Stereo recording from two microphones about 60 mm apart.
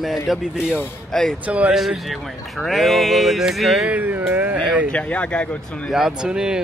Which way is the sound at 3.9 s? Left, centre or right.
Right.